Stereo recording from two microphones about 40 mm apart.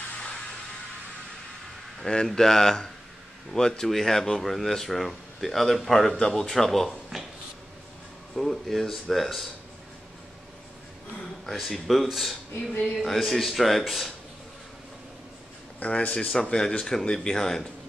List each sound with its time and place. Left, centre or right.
2.0 s speech: centre
8.4 s speech: centre
11.5 s speech: centre
15.8 s speech: left
16.2 s speech: centre